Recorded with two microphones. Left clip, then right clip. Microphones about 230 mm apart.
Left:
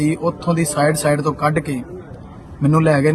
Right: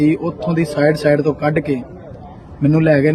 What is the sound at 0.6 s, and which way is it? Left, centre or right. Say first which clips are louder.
Speech: right 3 dB; centre.